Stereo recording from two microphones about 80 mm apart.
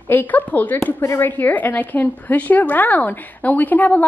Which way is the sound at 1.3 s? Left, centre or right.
Left.